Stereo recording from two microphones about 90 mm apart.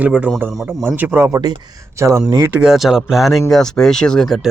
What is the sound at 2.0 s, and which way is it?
Speech, 35° right (ahead or behind).